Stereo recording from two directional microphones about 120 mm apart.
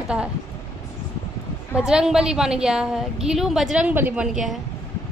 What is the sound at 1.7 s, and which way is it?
A woman's voice, 5° right (ahead or behind).